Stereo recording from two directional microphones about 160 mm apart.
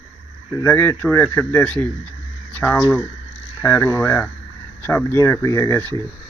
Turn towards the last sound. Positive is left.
turn(degrees=10)  # may be behind; listen again after turning